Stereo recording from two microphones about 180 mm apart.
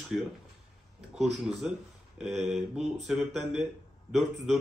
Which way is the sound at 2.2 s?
40° right (ahead or behind).